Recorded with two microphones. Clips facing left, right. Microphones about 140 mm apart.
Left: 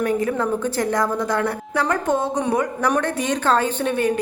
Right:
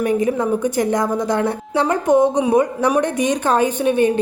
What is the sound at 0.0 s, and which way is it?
A woman's voice, 20° right (ahead or behind).